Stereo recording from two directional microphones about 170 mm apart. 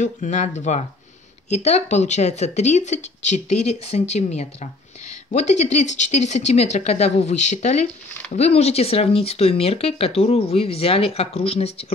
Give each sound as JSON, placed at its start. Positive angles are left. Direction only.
{"t": 0.0, "sound": "speech", "side_deg": 45}